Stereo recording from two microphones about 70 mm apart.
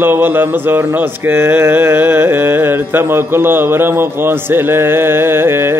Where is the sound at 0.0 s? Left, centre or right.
Right.